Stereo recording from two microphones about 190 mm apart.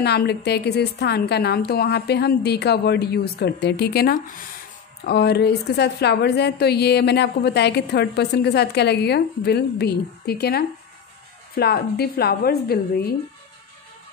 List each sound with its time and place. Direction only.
0.0 s a woman's voice: 60° left (ahead or behind)